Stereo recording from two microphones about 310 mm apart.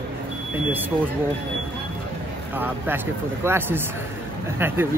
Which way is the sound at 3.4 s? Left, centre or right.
Centre.